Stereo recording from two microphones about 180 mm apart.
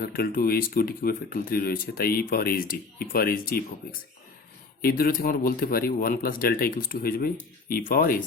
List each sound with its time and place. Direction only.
0.0 s speech: 55° left (ahead or behind)